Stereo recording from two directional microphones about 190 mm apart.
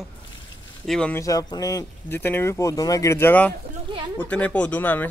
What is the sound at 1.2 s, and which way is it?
Speech, 20° left (ahead or behind).